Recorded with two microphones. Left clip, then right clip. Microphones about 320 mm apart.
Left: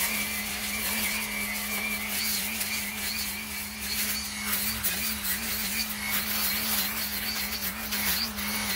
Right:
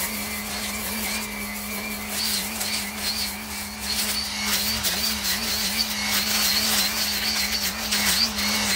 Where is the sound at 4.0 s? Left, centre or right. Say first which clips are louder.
Right 8 dB; centre.